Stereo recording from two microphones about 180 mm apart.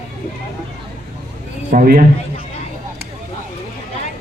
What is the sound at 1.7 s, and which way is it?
Speech, 55° right (ahead or behind).